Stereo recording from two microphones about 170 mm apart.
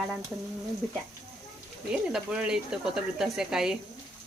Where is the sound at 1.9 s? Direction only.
5° right (ahead or behind).